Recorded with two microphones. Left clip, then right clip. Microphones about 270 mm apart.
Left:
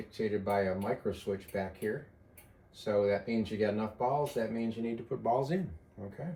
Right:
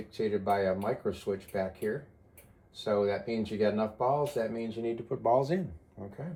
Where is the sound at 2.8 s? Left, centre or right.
Centre.